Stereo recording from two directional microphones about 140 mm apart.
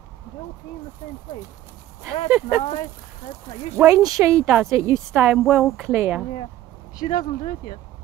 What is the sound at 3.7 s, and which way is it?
Speech, 25° right (ahead or behind).